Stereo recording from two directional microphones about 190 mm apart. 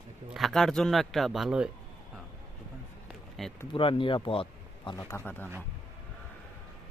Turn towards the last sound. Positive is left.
turn(degrees=10)  # may be behind; listen again after turning